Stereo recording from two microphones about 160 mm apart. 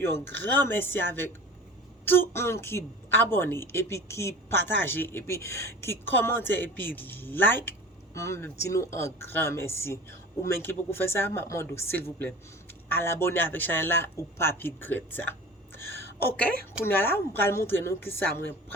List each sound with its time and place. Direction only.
0.0 s a woman's voice: 15° left (ahead or behind)
15.9 s a sound: 90° right
16.8 s a woman's voice: 15° left (ahead or behind)